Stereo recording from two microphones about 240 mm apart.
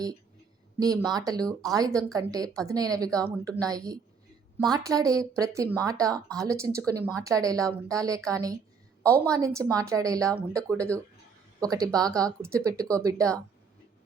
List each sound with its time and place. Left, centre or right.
0.8 s speech: centre
9.0 s a woman's voice: centre
9.3 s speech: centre